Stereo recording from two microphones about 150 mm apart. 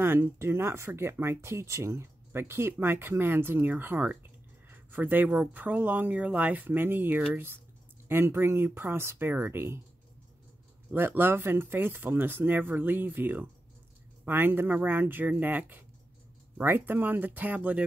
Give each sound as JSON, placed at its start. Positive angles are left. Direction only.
{"t": 0.0, "sound": "speech", "side_deg": -15}
{"t": 10.9, "sound": "speech", "side_deg": -15}